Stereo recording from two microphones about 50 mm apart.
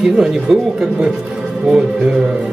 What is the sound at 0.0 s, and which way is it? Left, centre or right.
A man's voice, centre.